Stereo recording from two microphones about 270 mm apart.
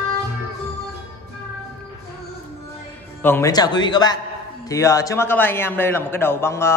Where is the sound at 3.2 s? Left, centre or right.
Centre.